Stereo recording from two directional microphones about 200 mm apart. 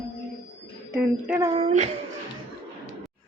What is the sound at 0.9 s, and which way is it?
Speech, 10° right (ahead or behind).